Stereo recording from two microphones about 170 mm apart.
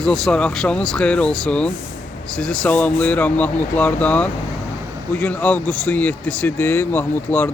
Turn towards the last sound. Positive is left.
turn(degrees=10)  # may be behind; listen again after turning